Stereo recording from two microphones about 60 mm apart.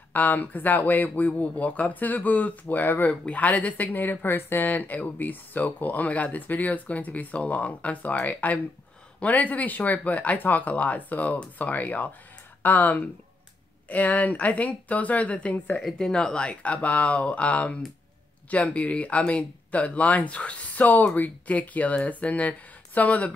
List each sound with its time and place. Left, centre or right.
0.1 s speech: left
15.7 s speech: centre